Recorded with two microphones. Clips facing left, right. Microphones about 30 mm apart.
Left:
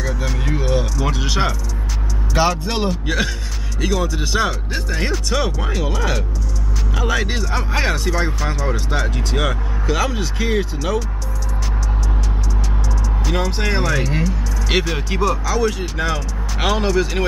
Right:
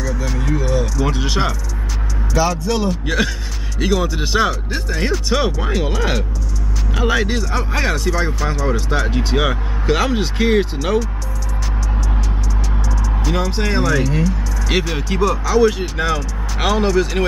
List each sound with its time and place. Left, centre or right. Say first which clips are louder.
0.6 s music: even; left
1.1 s speech: right 1 dB; centre
2.3 s speech: right 1 dB; left
2.9 s speech: right 2 dB; centre
3.8 s speech: right 2 dB; centre
4.5 s speech: right 2 dB; centre
5.3 s speech: right 3 dB; centre
7.2 s speech: right 2 dB; centre
9.1 s speech: right 3 dB; centre
13.2 s speech: right 1 dB; centre